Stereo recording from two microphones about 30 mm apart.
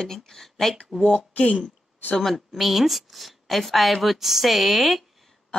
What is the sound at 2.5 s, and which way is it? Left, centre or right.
A woman's voice, centre.